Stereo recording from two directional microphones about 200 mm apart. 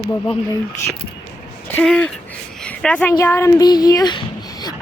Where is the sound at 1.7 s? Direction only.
5° left (ahead or behind).